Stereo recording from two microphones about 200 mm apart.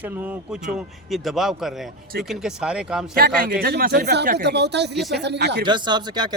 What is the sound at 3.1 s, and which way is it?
Speech, 45° right (ahead or behind).